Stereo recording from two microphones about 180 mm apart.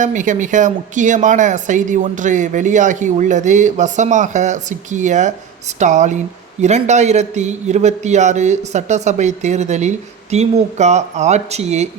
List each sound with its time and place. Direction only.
0.0 s a man's voice: 45° right (ahead or behind)